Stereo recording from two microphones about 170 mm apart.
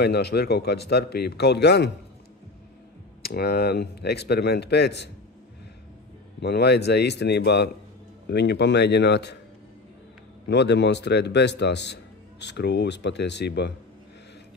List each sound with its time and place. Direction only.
0.0 s speech: 75° left (ahead or behind)
3.2 s speech: 65° left (ahead or behind)
6.4 s speech: 75° left (ahead or behind)
8.3 s a man's voice: 90° left
10.4 s a man's voice: 90° left